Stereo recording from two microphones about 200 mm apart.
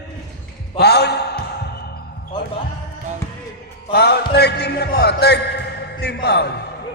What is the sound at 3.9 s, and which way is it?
Music, 55° left (ahead or behind).